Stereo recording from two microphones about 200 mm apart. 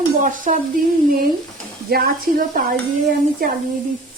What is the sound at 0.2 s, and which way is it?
Stir, 40° right (ahead or behind).